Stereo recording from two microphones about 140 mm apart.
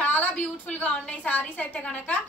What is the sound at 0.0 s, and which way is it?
A woman's voice, 10° left (ahead or behind).